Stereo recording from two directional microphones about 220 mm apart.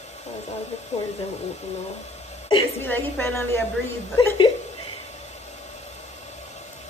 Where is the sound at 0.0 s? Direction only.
30° left (ahead or behind).